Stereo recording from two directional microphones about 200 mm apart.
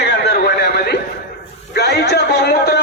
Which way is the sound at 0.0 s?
60° left (ahead or behind).